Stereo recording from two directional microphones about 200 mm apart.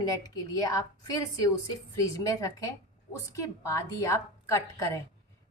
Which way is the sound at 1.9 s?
15° left (ahead or behind).